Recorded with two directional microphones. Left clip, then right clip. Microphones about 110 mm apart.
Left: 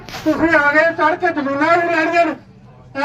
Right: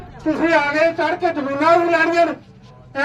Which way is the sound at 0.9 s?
10° left (ahead or behind).